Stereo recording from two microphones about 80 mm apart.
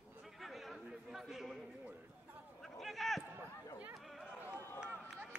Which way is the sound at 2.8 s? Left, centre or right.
Centre.